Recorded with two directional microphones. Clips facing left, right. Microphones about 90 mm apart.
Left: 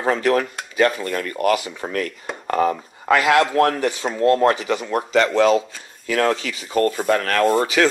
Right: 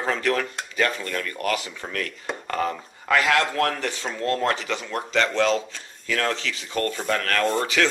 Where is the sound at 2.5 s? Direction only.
20° left (ahead or behind).